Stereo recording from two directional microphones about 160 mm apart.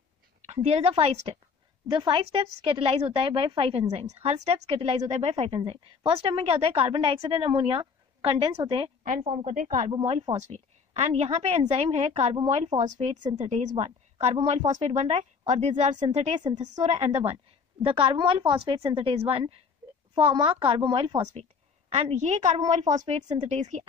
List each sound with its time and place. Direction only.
0.5 s a woman's voice: 40° right (ahead or behind)
9.5 s speech: 50° right (ahead or behind)
9.9 s a woman's voice: 40° right (ahead or behind)